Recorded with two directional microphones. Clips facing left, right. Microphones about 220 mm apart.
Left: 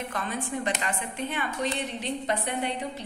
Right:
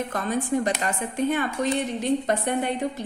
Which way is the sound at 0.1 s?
40° right (ahead or behind).